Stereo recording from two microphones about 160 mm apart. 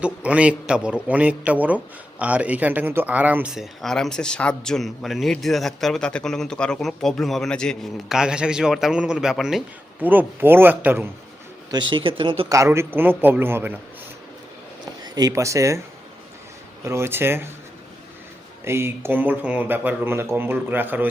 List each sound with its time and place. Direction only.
0.0 s a man's voice: 5° right (ahead or behind)
11.7 s speech: 30° right (ahead or behind)
12.5 s speech: 20° right (ahead or behind)
15.0 s speech: 25° right (ahead or behind)
16.8 s speech: 15° right (ahead or behind)
18.6 s speech: 15° right (ahead or behind)